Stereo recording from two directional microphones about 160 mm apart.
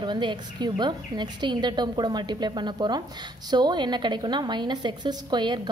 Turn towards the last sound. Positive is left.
turn(degrees=-30)  # may be behind; listen again after turning